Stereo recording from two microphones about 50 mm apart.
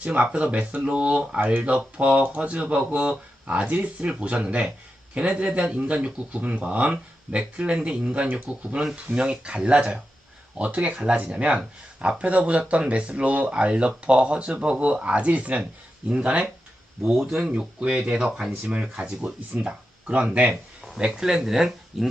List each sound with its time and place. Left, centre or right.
0.0 s speech: right
10.9 s speech: centre
17.0 s speech: centre
17.5 s speech: centre
21.1 s speech: centre